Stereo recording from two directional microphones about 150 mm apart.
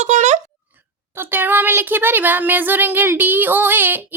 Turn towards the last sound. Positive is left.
turn(degrees=-15)  # may be behind; listen again after turning